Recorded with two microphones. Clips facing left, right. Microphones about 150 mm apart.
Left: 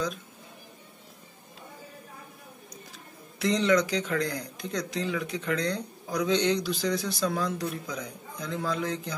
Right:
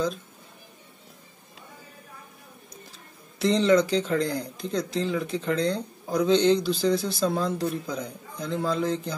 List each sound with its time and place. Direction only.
3.3 s a man's voice: 30° right (ahead or behind)